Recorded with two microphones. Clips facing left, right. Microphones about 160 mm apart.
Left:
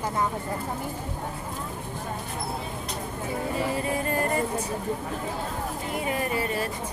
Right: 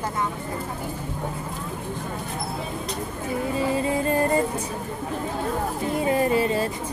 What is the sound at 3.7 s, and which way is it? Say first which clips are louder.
Music: right 5 dB; 25° right (ahead or behind).